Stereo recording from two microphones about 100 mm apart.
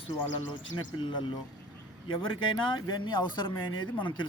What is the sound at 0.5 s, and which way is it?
Speech, 55° left (ahead or behind).